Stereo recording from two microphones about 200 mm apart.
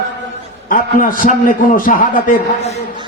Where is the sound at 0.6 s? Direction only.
45° left (ahead or behind).